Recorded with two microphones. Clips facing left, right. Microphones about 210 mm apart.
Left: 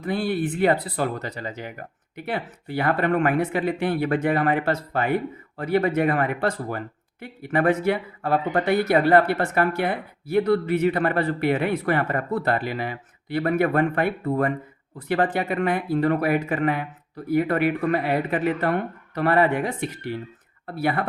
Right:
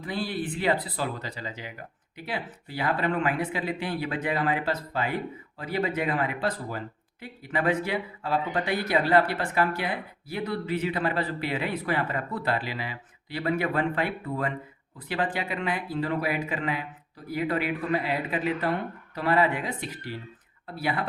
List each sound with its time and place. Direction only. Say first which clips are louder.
0.0 s speech: left 6 dB; 50° left (ahead or behind)